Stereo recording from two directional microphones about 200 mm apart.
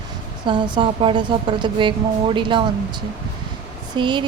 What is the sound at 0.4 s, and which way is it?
A woman's voice, 25° right (ahead or behind).